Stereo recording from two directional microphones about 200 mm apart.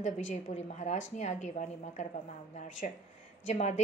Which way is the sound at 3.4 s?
35° left (ahead or behind).